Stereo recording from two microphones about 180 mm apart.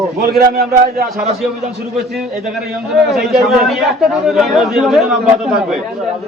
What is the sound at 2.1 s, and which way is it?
A man's voice, centre (ahead or behind).